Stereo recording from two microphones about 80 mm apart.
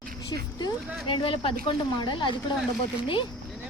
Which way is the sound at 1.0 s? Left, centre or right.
Left.